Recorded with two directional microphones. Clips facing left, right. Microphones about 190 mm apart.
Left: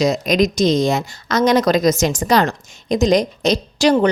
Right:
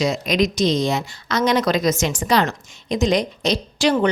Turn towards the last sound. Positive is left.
turn(degrees=40)  # may be behind; listen again after turning